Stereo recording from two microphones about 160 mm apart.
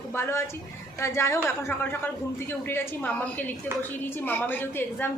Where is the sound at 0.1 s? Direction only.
15° left (ahead or behind).